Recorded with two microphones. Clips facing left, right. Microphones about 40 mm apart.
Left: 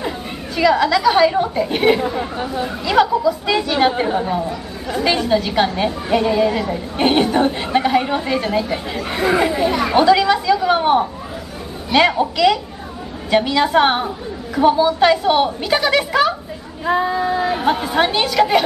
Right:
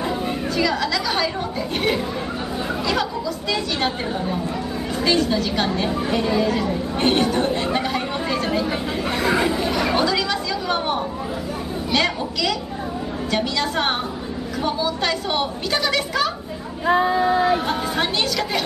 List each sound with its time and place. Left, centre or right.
0.6 s a woman's voice: centre
16.8 s child singing: centre
17.6 s a woman's voice: centre